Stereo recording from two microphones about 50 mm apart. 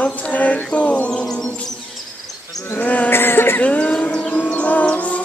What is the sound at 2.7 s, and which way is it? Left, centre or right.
Insect, left.